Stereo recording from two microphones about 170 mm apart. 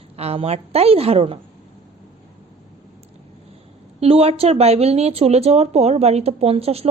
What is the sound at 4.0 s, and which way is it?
A woman's voice, 35° right (ahead or behind).